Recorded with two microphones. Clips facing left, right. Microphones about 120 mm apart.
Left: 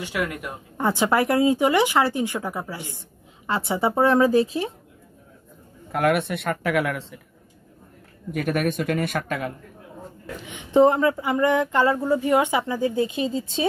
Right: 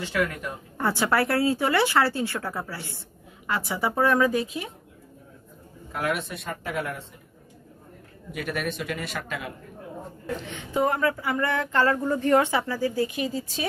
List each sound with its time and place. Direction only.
0.0 s speech: 15° left (ahead or behind)
3.4 s speech: 25° left (ahead or behind)
5.9 s speech: 60° left (ahead or behind); by 7.2 s 90° left
8.3 s speech: 50° left (ahead or behind)
10.4 s speech: 15° left (ahead or behind)
10.7 s speech: 25° left (ahead or behind)